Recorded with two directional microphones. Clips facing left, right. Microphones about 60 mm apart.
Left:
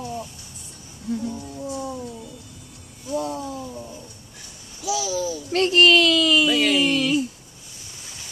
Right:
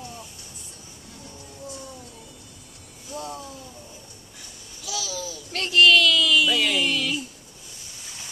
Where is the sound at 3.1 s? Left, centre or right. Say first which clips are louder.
Left 8 dB; left.